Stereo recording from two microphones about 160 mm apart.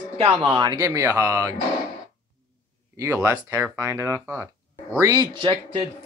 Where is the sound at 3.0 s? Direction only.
20° right (ahead or behind).